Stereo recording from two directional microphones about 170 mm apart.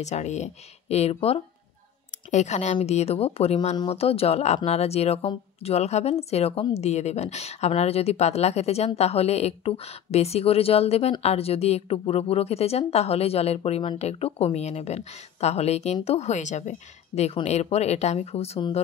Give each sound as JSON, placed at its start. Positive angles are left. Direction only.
{"t": 0.0, "sound": "a woman's voice", "side_deg": 40}